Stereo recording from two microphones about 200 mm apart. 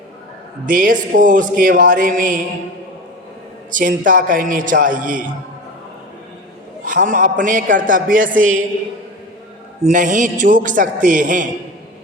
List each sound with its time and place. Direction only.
0.6 s a man's voice: 45° right (ahead or behind)
3.7 s a man's voice: 40° right (ahead or behind)
6.8 s a man's voice: 40° right (ahead or behind)
9.9 s a man's voice: 40° right (ahead or behind)